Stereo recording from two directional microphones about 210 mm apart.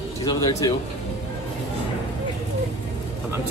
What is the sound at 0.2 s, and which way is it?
Speech, 15° left (ahead or behind).